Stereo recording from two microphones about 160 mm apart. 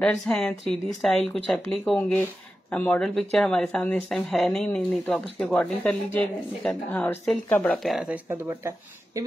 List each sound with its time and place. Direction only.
0.0 s speech: 5° left (ahead or behind)
7.9 s speech: 5° right (ahead or behind)
8.3 s speech: 20° right (ahead or behind)